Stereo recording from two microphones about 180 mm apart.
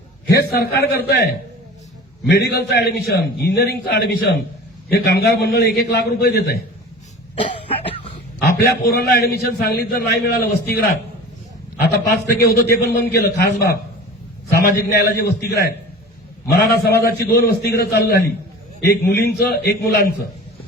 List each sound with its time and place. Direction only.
0.3 s a man's voice: 60° left (ahead or behind)
2.3 s a man's voice: 60° left (ahead or behind)
8.4 s a man's voice: 60° left (ahead or behind)